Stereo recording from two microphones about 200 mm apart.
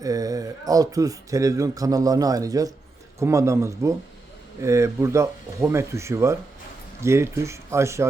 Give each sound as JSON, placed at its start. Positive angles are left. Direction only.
{"t": 0.0, "sound": "speech", "side_deg": -15}